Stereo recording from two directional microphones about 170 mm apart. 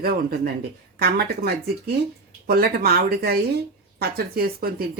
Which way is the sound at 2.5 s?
65° right (ahead or behind).